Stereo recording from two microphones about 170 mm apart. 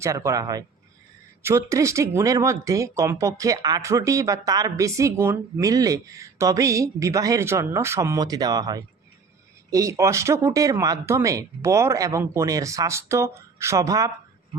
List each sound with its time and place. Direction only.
0.0 s speech: 15° right (ahead or behind)